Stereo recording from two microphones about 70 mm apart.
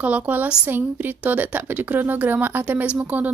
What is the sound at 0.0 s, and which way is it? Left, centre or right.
A woman's voice, right.